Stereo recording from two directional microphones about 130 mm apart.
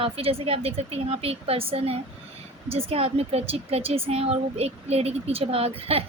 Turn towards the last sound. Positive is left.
turn(degrees=-50)  # may be behind; listen again after turning